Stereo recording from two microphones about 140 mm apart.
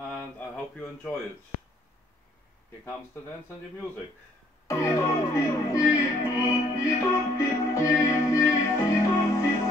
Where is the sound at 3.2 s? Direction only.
15° left (ahead or behind).